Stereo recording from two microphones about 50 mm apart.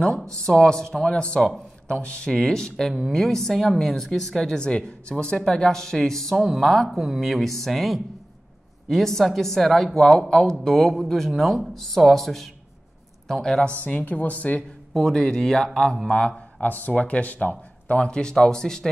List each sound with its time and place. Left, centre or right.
0.0 s speech: centre
2.3 s speech: centre
4.6 s a woman's voice: left
13.8 s speech: left
15.0 s speech: centre
16.6 s speech: left; by 18.9 s centre